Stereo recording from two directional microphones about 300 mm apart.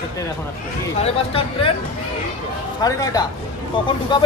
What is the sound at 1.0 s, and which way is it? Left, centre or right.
Speech, centre.